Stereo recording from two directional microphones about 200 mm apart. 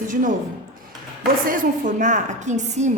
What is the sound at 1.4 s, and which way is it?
A woman's voice, 40° right (ahead or behind).